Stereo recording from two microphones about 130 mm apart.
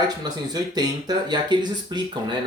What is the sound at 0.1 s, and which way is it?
Speech, 30° right (ahead or behind).